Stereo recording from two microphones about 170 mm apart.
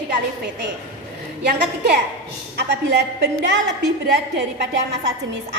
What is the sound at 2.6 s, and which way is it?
A woman's voice, 75° right (ahead or behind).